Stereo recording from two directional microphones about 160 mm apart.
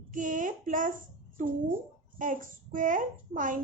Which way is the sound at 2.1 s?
55° right (ahead or behind).